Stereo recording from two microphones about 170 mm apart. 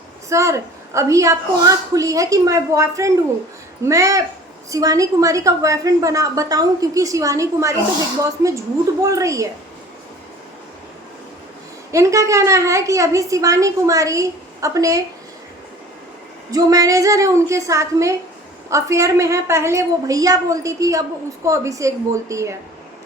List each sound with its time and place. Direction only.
0.3 s a woman's voice: 15° right (ahead or behind)
11.9 s a woman's voice: 20° right (ahead or behind)
16.5 s a woman's voice: 20° right (ahead or behind)